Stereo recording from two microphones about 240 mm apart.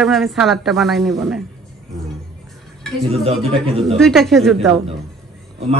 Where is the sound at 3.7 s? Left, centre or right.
Right.